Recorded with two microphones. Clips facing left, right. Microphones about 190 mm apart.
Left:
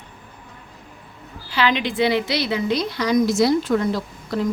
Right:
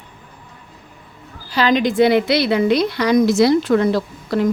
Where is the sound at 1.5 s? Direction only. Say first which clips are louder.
Right 5 dB; 40° right (ahead or behind); by 4.5 s 75° right (ahead or behind).